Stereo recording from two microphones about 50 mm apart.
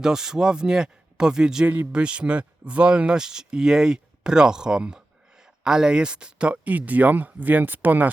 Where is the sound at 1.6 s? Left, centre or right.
Right.